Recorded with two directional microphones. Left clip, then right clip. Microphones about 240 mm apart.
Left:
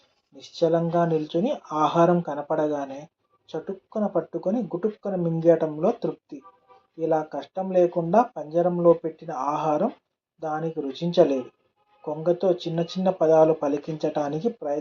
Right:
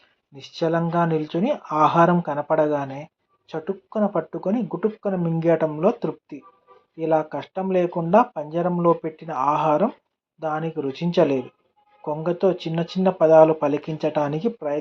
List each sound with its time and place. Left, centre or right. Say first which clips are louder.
0.3 s speech: left 1 dB; right